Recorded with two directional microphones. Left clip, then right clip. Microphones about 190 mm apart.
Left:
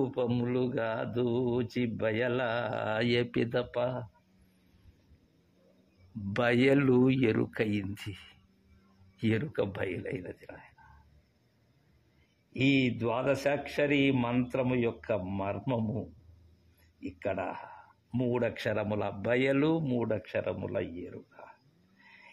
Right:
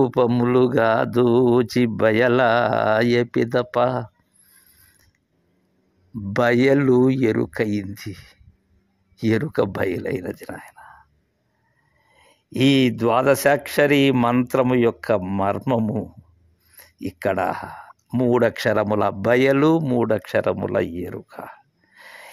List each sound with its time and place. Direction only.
0.0 s speech: 45° right (ahead or behind); by 3.6 s 30° right (ahead or behind)
3.7 s speech: 45° right (ahead or behind)
6.3 s speech: 25° right (ahead or behind)
9.2 s speech: 30° right (ahead or behind)
12.5 s speech: 45° right (ahead or behind)
22.0 s a sound: 45° right (ahead or behind)